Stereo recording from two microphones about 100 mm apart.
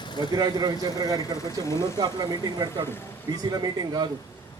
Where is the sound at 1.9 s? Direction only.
40° right (ahead or behind).